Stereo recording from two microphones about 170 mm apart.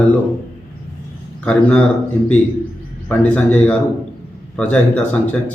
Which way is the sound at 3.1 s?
10° left (ahead or behind).